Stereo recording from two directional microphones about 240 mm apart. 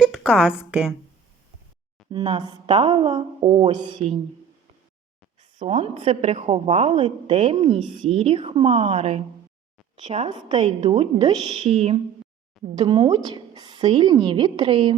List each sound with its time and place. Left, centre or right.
0.0 s a sound: centre
0.6 s a woman's voice: centre
2.0 s a woman's voice: centre
5.4 s a woman's voice: right